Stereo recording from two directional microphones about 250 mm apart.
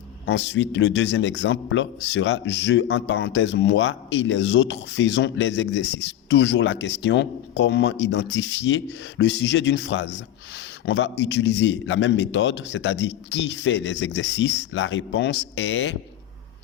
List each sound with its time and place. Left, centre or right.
0.3 s a man's voice: left